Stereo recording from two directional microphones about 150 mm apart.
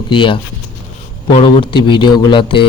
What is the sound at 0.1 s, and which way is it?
Speech, 35° left (ahead or behind).